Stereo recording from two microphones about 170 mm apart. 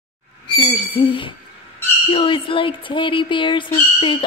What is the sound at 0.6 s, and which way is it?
Speech, 30° left (ahead or behind).